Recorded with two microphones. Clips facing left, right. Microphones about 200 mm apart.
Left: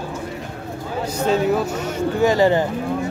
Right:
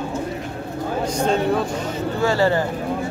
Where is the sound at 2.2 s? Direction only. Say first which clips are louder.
Left 3 dB; 15° left (ahead or behind).